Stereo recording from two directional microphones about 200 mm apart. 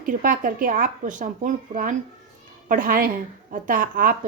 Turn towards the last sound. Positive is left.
turn(degrees=-45)  # may be behind; listen again after turning